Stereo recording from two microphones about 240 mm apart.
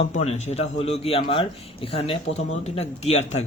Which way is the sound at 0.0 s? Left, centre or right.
Left.